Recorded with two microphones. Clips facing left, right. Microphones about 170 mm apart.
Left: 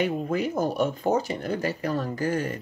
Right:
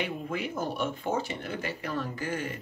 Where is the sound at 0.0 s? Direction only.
40° left (ahead or behind).